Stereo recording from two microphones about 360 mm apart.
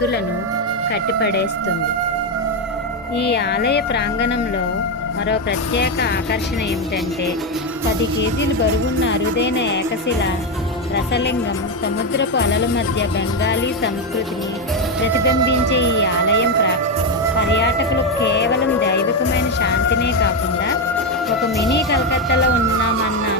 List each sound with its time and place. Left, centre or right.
3.2 s speech: left
9.0 s speech: left
10.9 s speech: left
15.7 s speech: left
18.3 s speech: left
21.7 s speech: left